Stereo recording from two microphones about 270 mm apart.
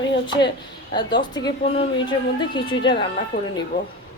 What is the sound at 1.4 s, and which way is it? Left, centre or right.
A woman's voice, centre.